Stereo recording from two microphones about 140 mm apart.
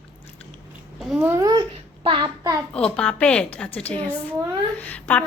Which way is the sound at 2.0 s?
35° right (ahead or behind).